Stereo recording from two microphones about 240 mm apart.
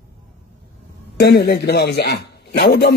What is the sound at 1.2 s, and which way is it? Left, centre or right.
A man's voice, left.